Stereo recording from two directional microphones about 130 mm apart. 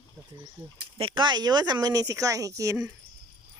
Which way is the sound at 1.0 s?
40° right (ahead or behind).